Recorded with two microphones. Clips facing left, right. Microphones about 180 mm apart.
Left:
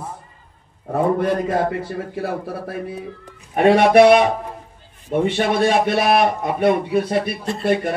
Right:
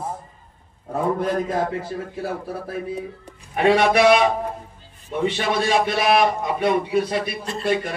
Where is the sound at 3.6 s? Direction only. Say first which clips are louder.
Left 5 dB; 55° left (ahead or behind).